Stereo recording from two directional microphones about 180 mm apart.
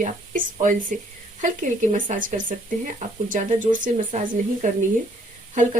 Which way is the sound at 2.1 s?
50° right (ahead or behind).